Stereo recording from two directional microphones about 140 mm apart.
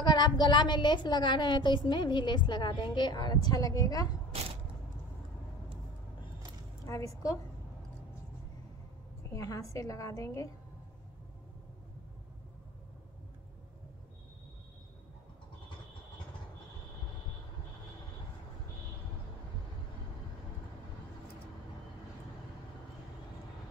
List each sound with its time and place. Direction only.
0.0 s a woman's voice: 30° left (ahead or behind)
4.3 s a sound: 45° right (ahead or behind)
6.9 s a woman's voice: 25° left (ahead or behind)
9.3 s a woman's voice: 25° left (ahead or behind)